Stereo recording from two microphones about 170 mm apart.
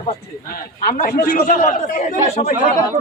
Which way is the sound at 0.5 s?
55° left (ahead or behind).